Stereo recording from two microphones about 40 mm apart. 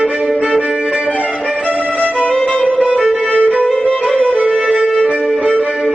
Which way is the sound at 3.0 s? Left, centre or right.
Centre.